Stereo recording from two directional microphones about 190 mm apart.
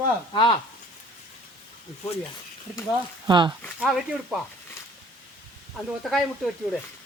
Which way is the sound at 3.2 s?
25° right (ahead or behind).